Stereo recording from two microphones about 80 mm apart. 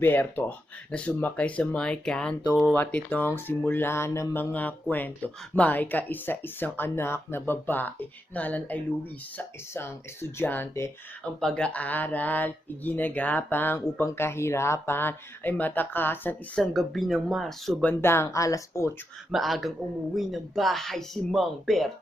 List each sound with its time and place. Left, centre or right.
0.0 s speech: left
2.7 s speech: left
4.5 s speech: left
9.4 s speech: left
11.3 s speech: centre
16.6 s speech: centre
18.0 s speech: left
19.3 s speech: centre